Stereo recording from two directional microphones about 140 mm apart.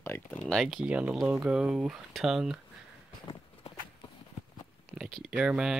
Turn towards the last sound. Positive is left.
turn(degrees=-5)  # may be behind; listen again after turning